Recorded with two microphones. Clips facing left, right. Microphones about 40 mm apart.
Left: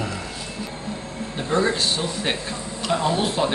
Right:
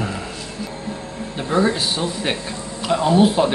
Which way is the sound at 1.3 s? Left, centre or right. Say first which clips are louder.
Right 3 dB; centre.